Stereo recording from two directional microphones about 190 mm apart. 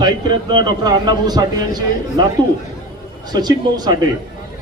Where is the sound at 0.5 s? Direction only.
20° right (ahead or behind).